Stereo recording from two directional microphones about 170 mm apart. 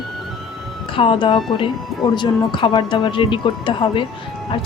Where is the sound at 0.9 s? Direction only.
30° left (ahead or behind).